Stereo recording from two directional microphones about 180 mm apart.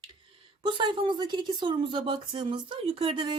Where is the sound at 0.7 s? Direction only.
25° right (ahead or behind).